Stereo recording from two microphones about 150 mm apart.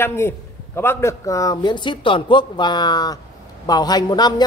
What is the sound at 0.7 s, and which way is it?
A woman's voice, 20° left (ahead or behind).